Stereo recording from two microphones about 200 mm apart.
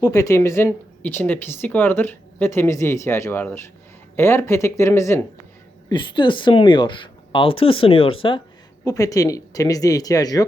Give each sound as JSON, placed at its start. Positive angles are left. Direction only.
{"t": 0.0, "sound": "a woman's voice", "side_deg": 15}
{"t": 5.9, "sound": "a woman's voice", "side_deg": 25}